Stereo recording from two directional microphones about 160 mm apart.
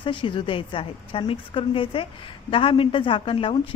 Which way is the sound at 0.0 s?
30° left (ahead or behind).